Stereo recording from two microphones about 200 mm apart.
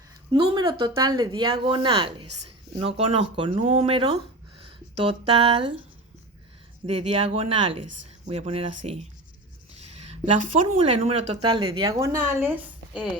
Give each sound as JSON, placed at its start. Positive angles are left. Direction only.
{"t": 0.3, "sound": "speech", "side_deg": -20}
{"t": 6.8, "sound": "a woman's voice", "side_deg": -30}
{"t": 11.5, "sound": "a woman's voice", "side_deg": -20}